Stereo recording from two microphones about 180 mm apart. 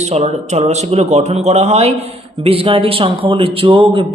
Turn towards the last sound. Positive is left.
turn(degrees=-30)  # may be behind; listen again after turning